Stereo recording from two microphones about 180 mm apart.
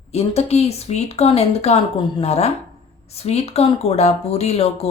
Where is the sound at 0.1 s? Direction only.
35° left (ahead or behind).